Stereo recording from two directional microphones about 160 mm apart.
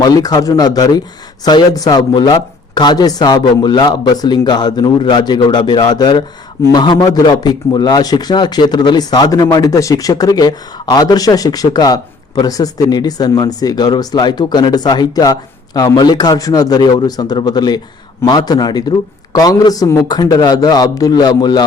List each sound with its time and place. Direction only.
0.0 s speech: 25° left (ahead or behind)